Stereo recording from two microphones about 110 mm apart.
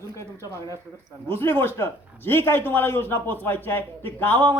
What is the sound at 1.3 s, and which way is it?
A man's voice, 20° left (ahead or behind).